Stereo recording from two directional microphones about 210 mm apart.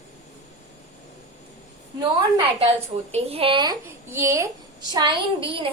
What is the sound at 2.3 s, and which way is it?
A woman's voice, 30° right (ahead or behind).